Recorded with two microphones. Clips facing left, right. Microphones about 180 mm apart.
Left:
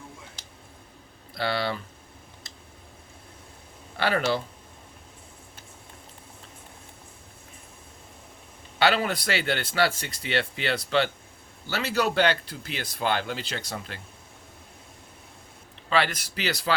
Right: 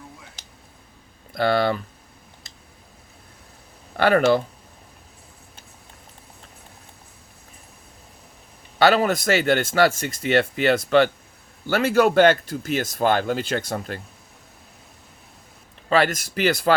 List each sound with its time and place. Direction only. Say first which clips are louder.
1.3 s speech: right 8 dB; 50° right (ahead or behind)
3.9 s speech: right 8 dB; 50° right (ahead or behind)
8.8 s speech: right 6 dB; 45° right (ahead or behind)
15.9 s speech: right 5 dB; 45° right (ahead or behind)